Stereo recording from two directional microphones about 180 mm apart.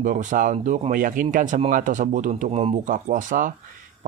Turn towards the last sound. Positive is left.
turn(degrees=-45)  # may be behind; listen again after turning